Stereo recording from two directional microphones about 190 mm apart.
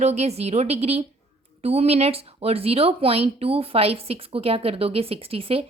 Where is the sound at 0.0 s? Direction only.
35° right (ahead or behind).